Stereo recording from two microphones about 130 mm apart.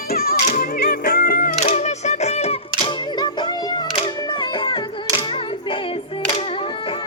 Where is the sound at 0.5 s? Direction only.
90° left; by 2.9 s 55° left (ahead or behind).